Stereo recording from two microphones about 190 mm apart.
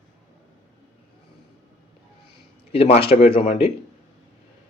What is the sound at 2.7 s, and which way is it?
Speech, 30° left (ahead or behind).